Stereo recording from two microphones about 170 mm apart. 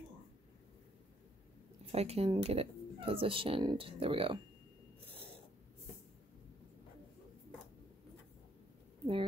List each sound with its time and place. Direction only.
1.9 s speech: 35° right (ahead or behind)